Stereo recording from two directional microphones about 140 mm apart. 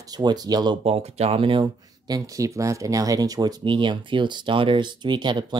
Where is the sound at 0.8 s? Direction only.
45° right (ahead or behind).